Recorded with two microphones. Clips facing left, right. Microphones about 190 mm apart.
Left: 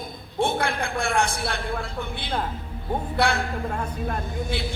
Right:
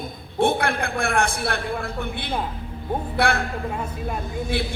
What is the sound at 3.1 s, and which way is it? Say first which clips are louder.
Music: right 1 dB; 55° right (ahead or behind).